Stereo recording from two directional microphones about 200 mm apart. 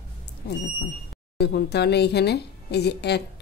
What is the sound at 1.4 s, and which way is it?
A woman's voice, 55° left (ahead or behind).